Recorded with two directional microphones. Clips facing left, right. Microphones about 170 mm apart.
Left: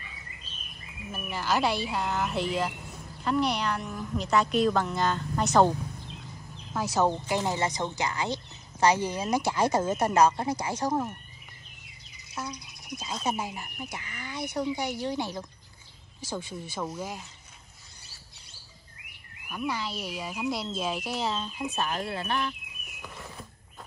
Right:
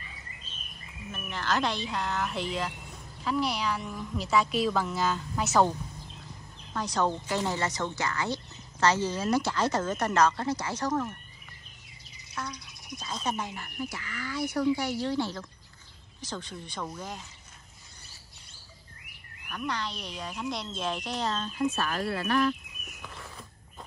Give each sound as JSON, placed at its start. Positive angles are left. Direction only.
{"t": 1.1, "sound": "a woman's voice", "side_deg": 10}
{"t": 6.2, "sound": "a sound", "side_deg": 5}
{"t": 7.1, "sound": "a woman's voice", "side_deg": 15}
{"t": 10.9, "sound": "speech", "side_deg": 25}
{"t": 12.9, "sound": "a woman's voice", "side_deg": 10}
{"t": 13.8, "sound": "a woman's voice", "side_deg": 20}
{"t": 19.4, "sound": "a woman's voice", "side_deg": 10}
{"t": 21.7, "sound": "speech", "side_deg": 20}